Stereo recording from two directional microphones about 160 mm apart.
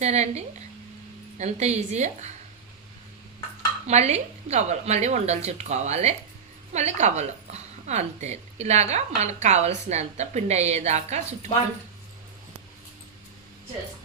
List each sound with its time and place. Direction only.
0.0 s a woman's voice: 45° right (ahead or behind)
3.8 s a woman's voice: 45° right (ahead or behind)